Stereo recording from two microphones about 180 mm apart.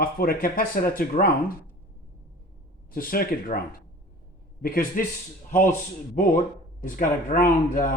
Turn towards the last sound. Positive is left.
turn(degrees=50)  # may be behind; listen again after turning